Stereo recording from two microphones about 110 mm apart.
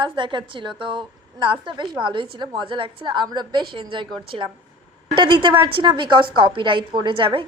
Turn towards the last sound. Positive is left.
turn(degrees=-50)  # may be behind; listen again after turning